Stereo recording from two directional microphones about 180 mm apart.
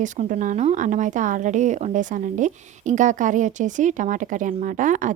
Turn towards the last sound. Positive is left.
turn(degrees=-45)  # may be behind; listen again after turning